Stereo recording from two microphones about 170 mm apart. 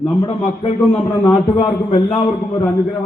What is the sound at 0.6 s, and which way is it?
A man's voice, 35° left (ahead or behind).